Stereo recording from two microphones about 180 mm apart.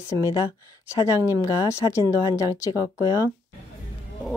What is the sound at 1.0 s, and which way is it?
Speech, 20° left (ahead or behind).